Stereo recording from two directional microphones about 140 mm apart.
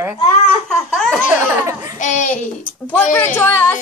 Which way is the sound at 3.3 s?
15° left (ahead or behind).